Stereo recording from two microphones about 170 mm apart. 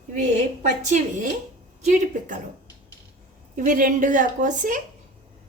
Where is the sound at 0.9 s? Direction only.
45° right (ahead or behind).